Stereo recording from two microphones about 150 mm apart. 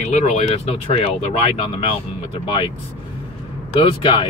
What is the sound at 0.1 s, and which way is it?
Speech, 45° left (ahead or behind).